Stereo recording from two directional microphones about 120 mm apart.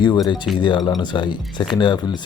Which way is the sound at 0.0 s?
40° left (ahead or behind).